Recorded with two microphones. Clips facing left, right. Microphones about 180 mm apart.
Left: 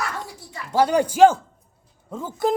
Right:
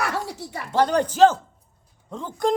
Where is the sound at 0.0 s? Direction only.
75° right (ahead or behind).